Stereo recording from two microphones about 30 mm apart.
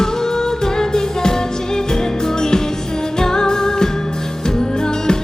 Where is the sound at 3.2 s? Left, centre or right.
Left.